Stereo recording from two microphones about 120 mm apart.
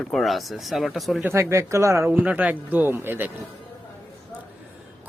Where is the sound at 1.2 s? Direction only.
25° right (ahead or behind).